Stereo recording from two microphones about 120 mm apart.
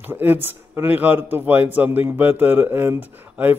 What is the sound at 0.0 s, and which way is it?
A man's voice, 15° right (ahead or behind).